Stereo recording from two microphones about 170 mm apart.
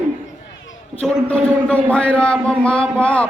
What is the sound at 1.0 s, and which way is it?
A man's voice, 5° left (ahead or behind).